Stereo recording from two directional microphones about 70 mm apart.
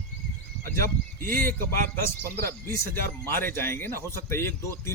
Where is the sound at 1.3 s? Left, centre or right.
Left.